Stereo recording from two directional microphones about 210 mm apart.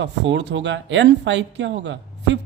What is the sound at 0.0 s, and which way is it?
Speech, 60° right (ahead or behind).